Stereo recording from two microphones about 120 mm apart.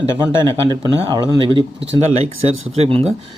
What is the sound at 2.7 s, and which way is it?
Speech, 60° right (ahead or behind).